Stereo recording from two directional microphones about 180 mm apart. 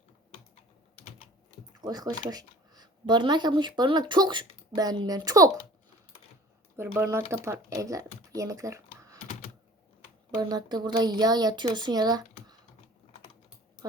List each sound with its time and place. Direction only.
1.8 s speech: 20° right (ahead or behind)
6.7 s speech: 10° right (ahead or behind)
8.3 s typing: 20° right (ahead or behind)
10.3 s speech: 25° right (ahead or behind)